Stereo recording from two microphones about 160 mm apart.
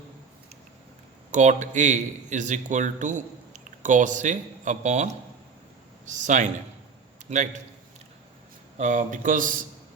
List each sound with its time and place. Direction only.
1.3 s a man's voice: 50° right (ahead or behind)
6.1 s a man's voice: 50° right (ahead or behind)
8.8 s speech: 50° right (ahead or behind)